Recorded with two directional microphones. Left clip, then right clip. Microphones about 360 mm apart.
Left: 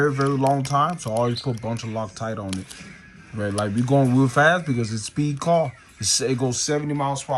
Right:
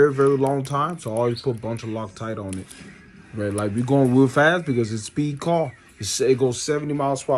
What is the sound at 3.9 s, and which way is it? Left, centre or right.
Speech, centre.